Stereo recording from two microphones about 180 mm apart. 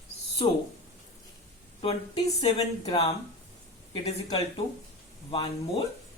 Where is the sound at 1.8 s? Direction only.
30° left (ahead or behind).